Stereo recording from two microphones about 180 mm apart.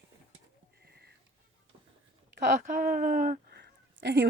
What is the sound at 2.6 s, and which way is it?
Speech, 50° right (ahead or behind).